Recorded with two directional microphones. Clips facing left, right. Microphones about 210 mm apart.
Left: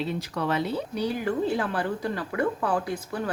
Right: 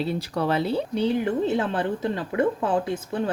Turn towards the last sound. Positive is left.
turn(degrees=-25)  # may be behind; listen again after turning